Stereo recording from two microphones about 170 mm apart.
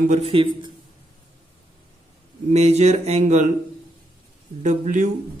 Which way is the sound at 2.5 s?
40° right (ahead or behind).